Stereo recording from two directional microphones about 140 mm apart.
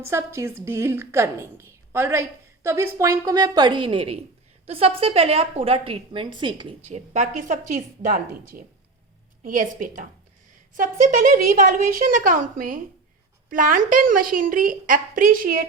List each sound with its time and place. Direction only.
0.0 s a woman's voice: 20° right (ahead or behind); by 6.7 s 35° right (ahead or behind)
6.8 s a woman's voice: 55° right (ahead or behind); by 8.6 s 90° right
9.4 s a woman's voice: 75° right (ahead or behind)